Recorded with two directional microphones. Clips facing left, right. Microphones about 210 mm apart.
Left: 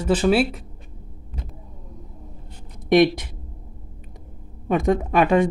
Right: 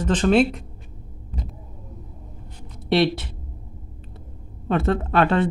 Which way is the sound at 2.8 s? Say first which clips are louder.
Left 4 dB; 15° left (ahead or behind).